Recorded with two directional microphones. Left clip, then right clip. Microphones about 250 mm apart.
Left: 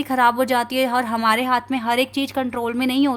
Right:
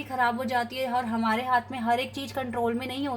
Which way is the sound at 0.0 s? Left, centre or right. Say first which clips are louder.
Left 9 dB; left.